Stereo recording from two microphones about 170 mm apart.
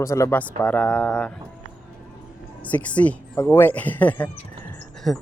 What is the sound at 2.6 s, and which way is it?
Speech, 10° left (ahead or behind).